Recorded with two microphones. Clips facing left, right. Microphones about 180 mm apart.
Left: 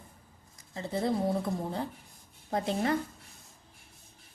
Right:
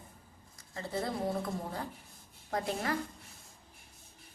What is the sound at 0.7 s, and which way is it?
Speech, 20° left (ahead or behind).